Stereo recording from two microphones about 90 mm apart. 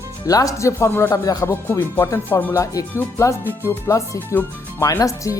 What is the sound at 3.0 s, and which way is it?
Speech, 25° left (ahead or behind).